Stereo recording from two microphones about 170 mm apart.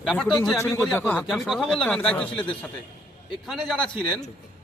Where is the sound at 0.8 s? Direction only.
10° left (ahead or behind).